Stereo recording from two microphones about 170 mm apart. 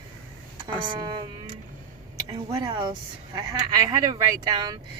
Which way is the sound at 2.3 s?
20° right (ahead or behind).